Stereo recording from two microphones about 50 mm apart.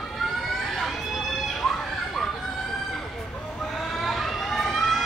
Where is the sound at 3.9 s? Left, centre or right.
Centre.